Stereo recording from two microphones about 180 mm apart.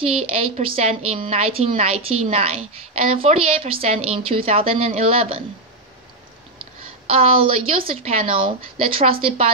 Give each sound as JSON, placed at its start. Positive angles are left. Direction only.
{"t": 0.2, "sound": "a woman's voice", "side_deg": -30}
{"t": 7.1, "sound": "a woman's voice", "side_deg": -30}